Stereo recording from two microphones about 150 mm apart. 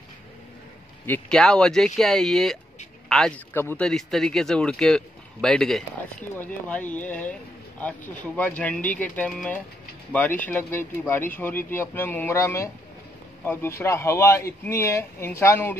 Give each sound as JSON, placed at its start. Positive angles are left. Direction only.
{"t": 1.0, "sound": "speech", "side_deg": 10}